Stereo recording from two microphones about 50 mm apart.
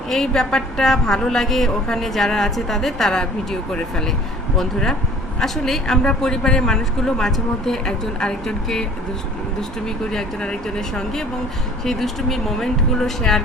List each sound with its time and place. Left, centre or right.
0.1 s a woman's voice: centre